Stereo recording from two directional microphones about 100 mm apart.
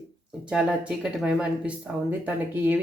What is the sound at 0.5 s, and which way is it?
Speech, 10° right (ahead or behind).